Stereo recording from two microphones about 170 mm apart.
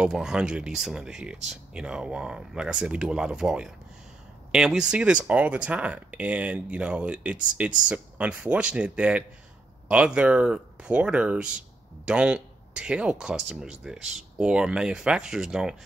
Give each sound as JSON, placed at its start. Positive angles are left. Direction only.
{"t": 0.0, "sound": "speech", "side_deg": -5}